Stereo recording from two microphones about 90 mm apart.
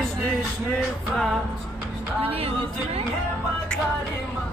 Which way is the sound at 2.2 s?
90° right.